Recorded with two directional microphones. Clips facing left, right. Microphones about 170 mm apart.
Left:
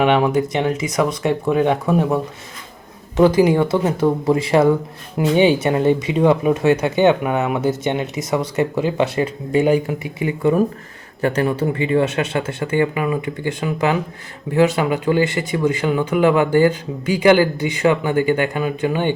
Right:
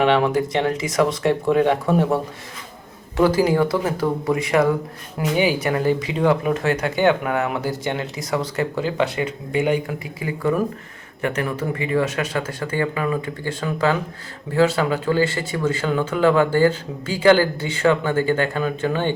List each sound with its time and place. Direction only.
0.0 s speech: 20° left (ahead or behind)
3.2 s speech: 20° left (ahead or behind)
11.2 s speech: 35° left (ahead or behind); by 19.1 s 15° left (ahead or behind)